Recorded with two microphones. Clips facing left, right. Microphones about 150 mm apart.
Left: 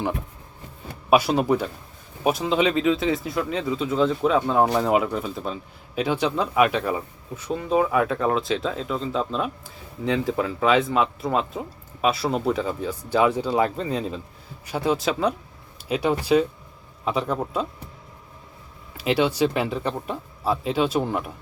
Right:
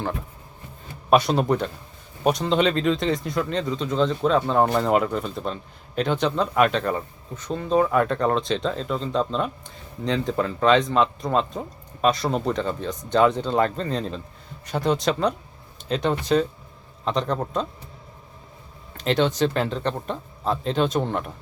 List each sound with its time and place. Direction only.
1.1 s speech: 5° left (ahead or behind)
18.9 s speech: 10° left (ahead or behind)